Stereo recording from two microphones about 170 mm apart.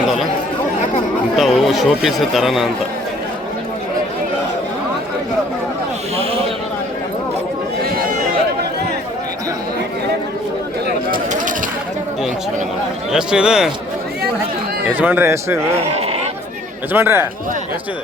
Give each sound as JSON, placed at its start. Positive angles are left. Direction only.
{"t": 1.4, "sound": "speech", "side_deg": 0}
{"t": 7.8, "sound": "chatter", "side_deg": -60}
{"t": 11.1, "sound": "a sound", "side_deg": -50}
{"t": 13.1, "sound": "speech", "side_deg": -5}
{"t": 14.9, "sound": "a man's voice", "side_deg": -10}
{"t": 16.9, "sound": "a man's voice", "side_deg": -15}